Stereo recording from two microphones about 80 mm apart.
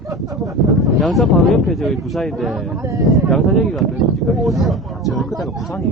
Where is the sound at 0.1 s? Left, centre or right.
Right.